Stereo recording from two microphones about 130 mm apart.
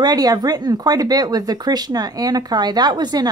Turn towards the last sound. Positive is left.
turn(degrees=-35)  # may be behind; listen again after turning